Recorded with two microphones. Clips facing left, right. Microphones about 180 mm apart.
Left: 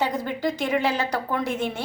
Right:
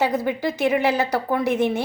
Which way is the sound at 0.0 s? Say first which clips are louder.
Right 3 dB; 10° right (ahead or behind).